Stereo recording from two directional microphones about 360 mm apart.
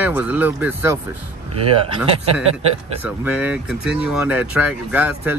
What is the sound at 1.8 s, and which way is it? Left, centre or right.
Speech, centre.